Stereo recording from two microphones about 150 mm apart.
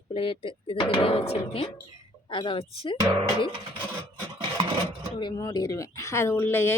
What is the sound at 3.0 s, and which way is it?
Music, 20° right (ahead or behind).